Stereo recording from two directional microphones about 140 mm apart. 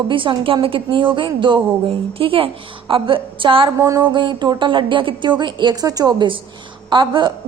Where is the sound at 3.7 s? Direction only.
25° right (ahead or behind).